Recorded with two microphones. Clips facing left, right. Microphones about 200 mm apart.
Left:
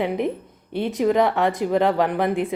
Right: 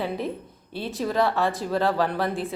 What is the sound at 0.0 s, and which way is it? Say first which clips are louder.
Speech: left 5 dB; 20° left (ahead or behind).